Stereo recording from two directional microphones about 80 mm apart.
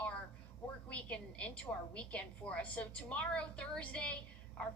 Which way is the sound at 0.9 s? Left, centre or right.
Centre.